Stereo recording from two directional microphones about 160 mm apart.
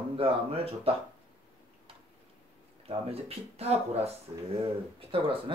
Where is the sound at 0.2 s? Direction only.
35° right (ahead or behind).